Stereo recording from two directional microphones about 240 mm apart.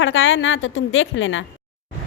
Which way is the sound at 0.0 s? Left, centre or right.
Left.